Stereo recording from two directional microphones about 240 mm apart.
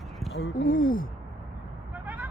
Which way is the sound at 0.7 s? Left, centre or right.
Left.